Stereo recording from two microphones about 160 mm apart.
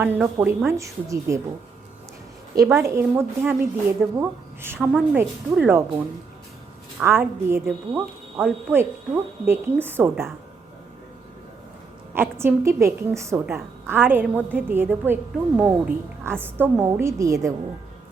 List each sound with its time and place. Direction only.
0.0 s a woman's voice: 10° right (ahead or behind)
2.7 s a woman's voice: 15° right (ahead or behind)
7.0 s a woman's voice: 15° right (ahead or behind)
12.1 s a woman's voice: 15° right (ahead or behind)